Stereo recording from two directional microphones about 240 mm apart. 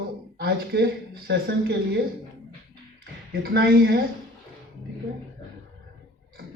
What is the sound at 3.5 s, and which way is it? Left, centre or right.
Speech, right.